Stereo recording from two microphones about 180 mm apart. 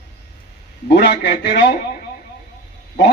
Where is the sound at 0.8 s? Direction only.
65° left (ahead or behind).